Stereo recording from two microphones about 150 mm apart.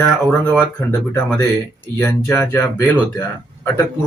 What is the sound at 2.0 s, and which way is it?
Speech, 10° left (ahead or behind).